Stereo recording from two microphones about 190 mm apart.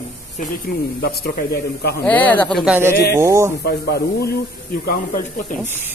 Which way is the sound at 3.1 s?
15° right (ahead or behind).